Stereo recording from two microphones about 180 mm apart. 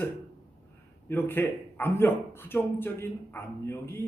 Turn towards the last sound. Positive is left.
turn(degrees=15)  # may be behind; listen again after turning